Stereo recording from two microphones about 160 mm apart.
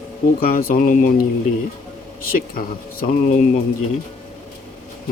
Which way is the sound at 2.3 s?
60° left (ahead or behind).